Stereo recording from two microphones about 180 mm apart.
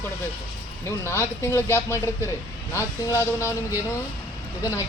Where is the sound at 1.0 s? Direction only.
15° left (ahead or behind).